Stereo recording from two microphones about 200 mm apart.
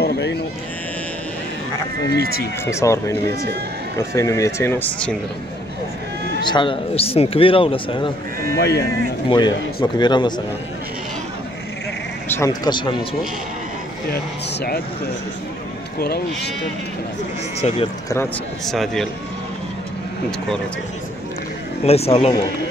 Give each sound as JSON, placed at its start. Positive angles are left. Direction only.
{"t": 0.0, "sound": "a sound", "side_deg": 60}
{"t": 2.1, "sound": "speech", "side_deg": 50}
{"t": 2.7, "sound": "speech", "side_deg": 15}
{"t": 6.4, "sound": "speech", "side_deg": 25}
{"t": 8.5, "sound": "speech", "side_deg": 55}
{"t": 9.3, "sound": "speech", "side_deg": 25}
{"t": 12.3, "sound": "speech", "side_deg": 15}
{"t": 14.1, "sound": "speech", "side_deg": 50}
{"t": 17.6, "sound": "a man's voice", "side_deg": 30}
{"t": 18.7, "sound": "speech", "side_deg": 0}
{"t": 20.2, "sound": "speech", "side_deg": 5}
{"t": 21.8, "sound": "a man's voice", "side_deg": 30}